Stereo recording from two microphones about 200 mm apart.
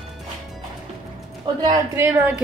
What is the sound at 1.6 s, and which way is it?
Speech, 15° right (ahead or behind).